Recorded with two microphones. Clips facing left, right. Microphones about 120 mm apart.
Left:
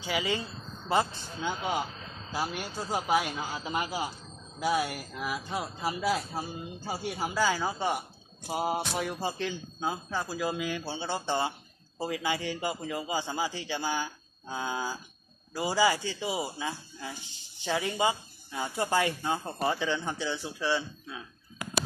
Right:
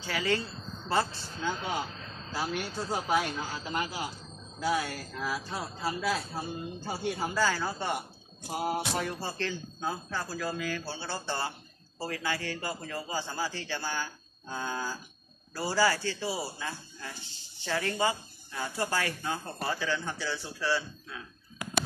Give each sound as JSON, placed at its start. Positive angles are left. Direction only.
{"t": 0.0, "sound": "a man's voice", "side_deg": 15}
{"t": 6.8, "sound": "a man's voice", "side_deg": 5}